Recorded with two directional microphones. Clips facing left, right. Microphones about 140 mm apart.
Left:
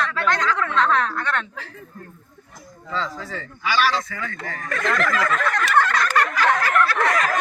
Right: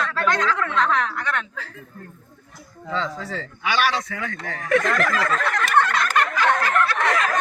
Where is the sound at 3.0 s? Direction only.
70° right (ahead or behind).